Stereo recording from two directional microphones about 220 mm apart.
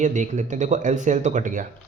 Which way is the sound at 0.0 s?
35° right (ahead or behind).